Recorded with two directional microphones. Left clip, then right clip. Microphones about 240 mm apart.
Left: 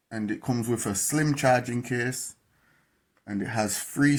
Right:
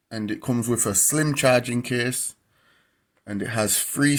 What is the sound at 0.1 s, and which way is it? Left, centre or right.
Speech, right.